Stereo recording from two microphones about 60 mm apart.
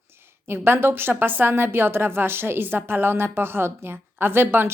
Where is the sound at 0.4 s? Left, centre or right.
Right.